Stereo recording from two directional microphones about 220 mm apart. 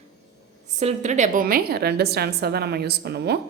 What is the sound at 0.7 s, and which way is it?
A woman's voice, 30° right (ahead or behind).